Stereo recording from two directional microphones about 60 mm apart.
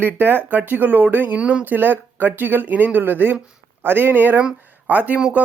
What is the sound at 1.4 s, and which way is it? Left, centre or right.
Speech, centre.